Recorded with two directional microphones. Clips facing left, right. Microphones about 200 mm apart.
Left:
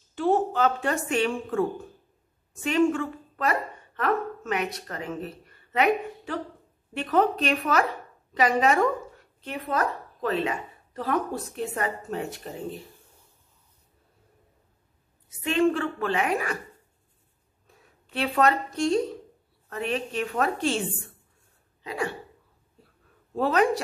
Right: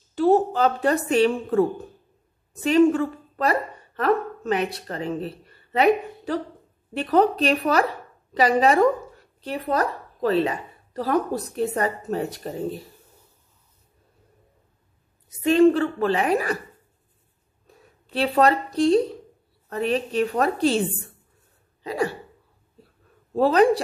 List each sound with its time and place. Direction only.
0.1 s a woman's voice: 35° right (ahead or behind)
15.2 s a woman's voice: 40° right (ahead or behind)
18.1 s a woman's voice: 35° right (ahead or behind)
21.8 s a woman's voice: 40° right (ahead or behind)
23.3 s a woman's voice: 35° right (ahead or behind)